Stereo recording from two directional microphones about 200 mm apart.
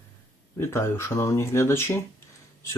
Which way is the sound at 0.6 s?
15° left (ahead or behind).